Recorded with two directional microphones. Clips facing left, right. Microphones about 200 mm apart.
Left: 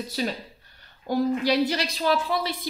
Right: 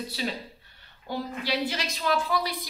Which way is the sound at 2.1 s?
25° left (ahead or behind).